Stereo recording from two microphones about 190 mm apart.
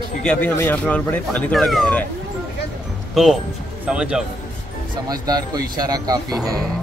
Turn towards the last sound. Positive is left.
turn(degrees=-20)  # may be behind; listen again after turning